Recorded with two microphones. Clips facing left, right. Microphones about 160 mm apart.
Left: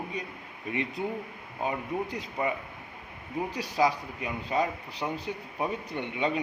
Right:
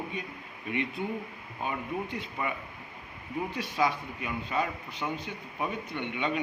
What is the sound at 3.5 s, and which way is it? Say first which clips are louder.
A man's voice: left 3 dB; 35° left (ahead or behind).